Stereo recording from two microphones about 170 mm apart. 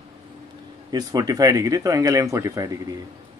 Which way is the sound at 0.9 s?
20° right (ahead or behind).